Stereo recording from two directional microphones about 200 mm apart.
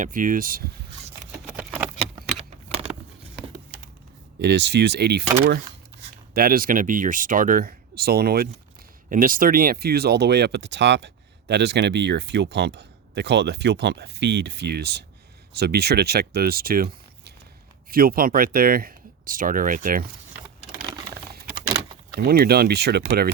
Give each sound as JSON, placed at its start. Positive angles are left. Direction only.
{"t": 0.0, "sound": "speech", "side_deg": -40}
{"t": 1.5, "sound": "patter", "side_deg": -5}
{"t": 4.4, "sound": "speech", "side_deg": -60}
{"t": 6.3, "sound": "speech", "side_deg": -50}
{"t": 22.2, "sound": "speech", "side_deg": -50}